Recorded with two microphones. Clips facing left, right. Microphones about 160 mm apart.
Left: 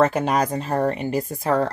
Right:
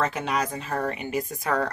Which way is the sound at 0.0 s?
45° left (ahead or behind).